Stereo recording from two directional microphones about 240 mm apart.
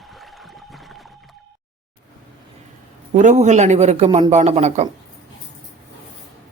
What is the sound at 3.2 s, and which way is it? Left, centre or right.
Speech, right.